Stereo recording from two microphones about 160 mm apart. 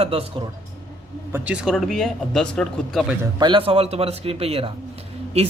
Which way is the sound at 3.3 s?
30° right (ahead or behind).